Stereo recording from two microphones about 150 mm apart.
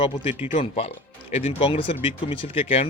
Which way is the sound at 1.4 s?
40° left (ahead or behind).